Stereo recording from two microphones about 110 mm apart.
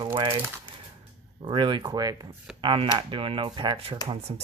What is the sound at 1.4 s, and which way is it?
Speech, 50° right (ahead or behind).